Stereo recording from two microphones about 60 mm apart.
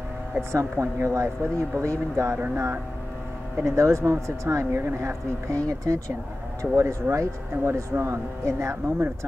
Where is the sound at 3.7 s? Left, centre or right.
Right.